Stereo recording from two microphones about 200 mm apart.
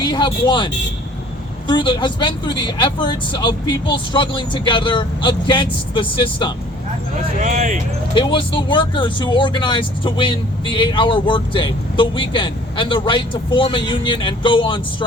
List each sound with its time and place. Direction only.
0.0 s speech: 20° left (ahead or behind)
7.4 s speech: 40° right (ahead or behind)
8.1 s speech: 25° left (ahead or behind)